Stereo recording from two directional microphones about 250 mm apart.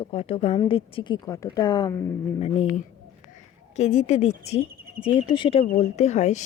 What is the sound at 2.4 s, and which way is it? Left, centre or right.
Speech, left.